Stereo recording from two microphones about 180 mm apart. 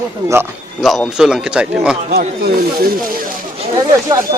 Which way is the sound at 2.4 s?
55° right (ahead or behind).